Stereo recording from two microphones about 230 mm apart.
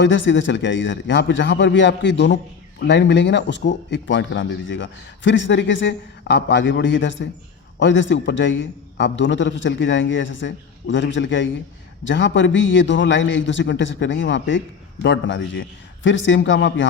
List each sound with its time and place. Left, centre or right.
0.0 s a man's voice: left